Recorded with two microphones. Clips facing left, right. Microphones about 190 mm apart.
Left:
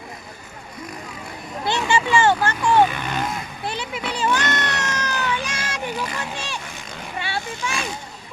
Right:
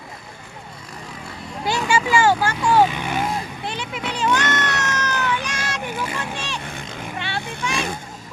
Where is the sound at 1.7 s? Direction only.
10° right (ahead or behind).